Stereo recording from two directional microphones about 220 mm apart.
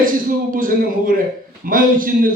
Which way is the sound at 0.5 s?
40° right (ahead or behind).